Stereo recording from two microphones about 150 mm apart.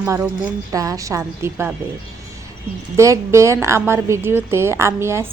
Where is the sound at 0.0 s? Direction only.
15° right (ahead or behind).